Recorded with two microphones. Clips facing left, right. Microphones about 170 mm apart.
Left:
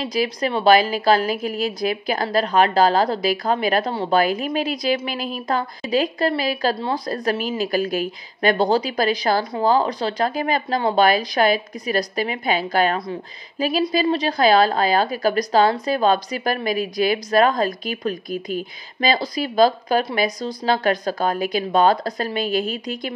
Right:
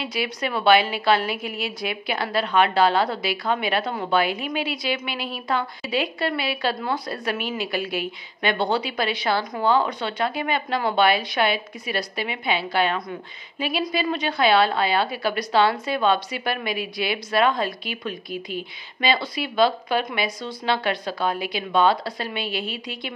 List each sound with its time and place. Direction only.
0.0 s a woman's voice: 35° left (ahead or behind)